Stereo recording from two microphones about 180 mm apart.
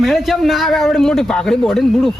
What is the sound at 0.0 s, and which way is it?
Speech, centre (ahead or behind).